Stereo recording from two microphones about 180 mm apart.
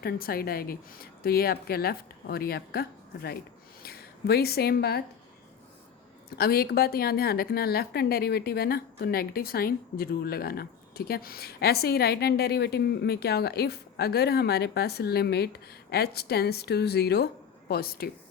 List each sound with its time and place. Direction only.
0.0 s a woman's voice: 55° left (ahead or behind)
6.3 s a woman's voice: 60° left (ahead or behind)